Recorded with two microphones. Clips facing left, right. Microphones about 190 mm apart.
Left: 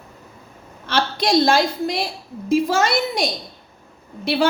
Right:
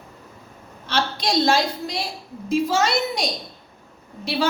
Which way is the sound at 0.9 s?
55° left (ahead or behind).